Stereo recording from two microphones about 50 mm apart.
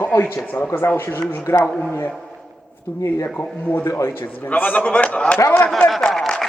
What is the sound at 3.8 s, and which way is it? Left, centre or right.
Speech, left.